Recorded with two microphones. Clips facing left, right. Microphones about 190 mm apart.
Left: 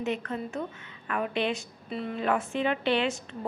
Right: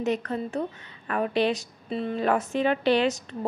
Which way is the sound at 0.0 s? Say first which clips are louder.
Right 4 dB; 40° right (ahead or behind).